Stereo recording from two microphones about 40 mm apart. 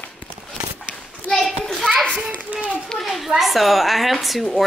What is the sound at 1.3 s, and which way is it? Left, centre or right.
Children playing, centre.